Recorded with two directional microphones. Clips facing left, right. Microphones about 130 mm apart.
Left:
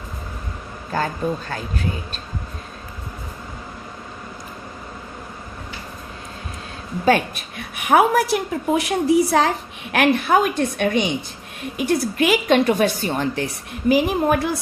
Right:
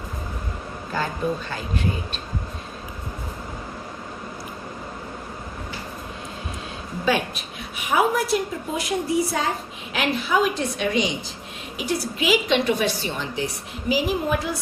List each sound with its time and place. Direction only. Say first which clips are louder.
7.0 s a woman's voice: left 5 dB; 55° left (ahead or behind); by 9.5 s 80° left
9.9 s a woman's voice: left 6 dB; 60° left (ahead or behind)